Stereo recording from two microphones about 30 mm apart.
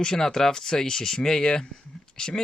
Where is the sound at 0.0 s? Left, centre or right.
Centre.